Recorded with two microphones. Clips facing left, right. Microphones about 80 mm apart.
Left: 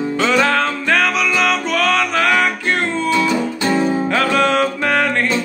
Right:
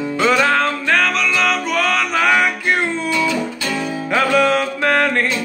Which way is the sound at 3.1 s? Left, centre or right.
Left.